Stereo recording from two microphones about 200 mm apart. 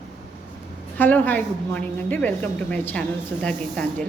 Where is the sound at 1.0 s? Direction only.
10° left (ahead or behind).